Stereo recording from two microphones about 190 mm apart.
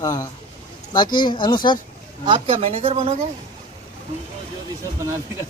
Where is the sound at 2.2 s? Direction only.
30° right (ahead or behind).